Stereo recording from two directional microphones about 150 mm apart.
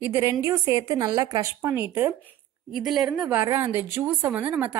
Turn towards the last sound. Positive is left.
turn(degrees=-10)  # may be behind; listen again after turning